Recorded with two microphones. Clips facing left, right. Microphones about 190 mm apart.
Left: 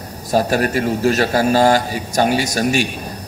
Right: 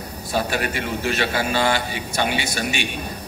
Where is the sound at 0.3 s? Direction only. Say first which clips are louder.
Left 7 dB; 40° left (ahead or behind).